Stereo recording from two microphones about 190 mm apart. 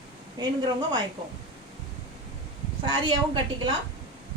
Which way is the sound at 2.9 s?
25° right (ahead or behind).